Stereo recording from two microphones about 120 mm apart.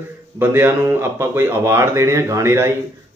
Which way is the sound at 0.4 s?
15° right (ahead or behind).